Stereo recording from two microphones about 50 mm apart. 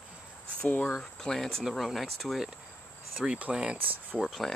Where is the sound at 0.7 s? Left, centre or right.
Left.